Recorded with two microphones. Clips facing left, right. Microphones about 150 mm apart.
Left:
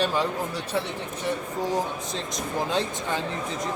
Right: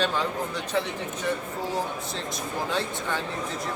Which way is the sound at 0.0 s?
10° left (ahead or behind).